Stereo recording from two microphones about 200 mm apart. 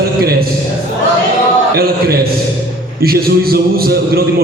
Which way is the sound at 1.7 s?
50° right (ahead or behind).